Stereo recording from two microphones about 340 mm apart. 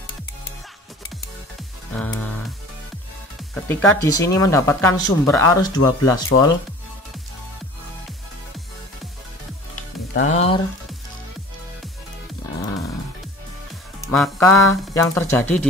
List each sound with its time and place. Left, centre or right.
3.6 s speech: centre
10.1 s speech: left
14.0 s speech: centre